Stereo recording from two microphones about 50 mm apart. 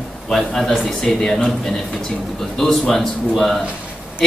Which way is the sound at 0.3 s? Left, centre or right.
Centre.